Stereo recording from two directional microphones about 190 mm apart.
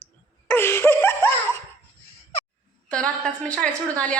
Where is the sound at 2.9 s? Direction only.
5° left (ahead or behind).